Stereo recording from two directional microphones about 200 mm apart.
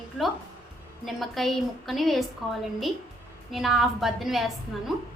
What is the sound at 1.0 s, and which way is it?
A woman's voice, centre (ahead or behind).